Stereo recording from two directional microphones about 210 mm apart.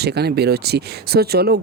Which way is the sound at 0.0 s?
50° right (ahead or behind).